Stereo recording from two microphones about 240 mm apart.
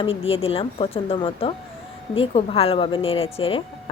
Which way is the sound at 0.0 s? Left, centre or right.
Left.